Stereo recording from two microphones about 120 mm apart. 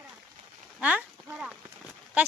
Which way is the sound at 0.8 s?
10° right (ahead or behind).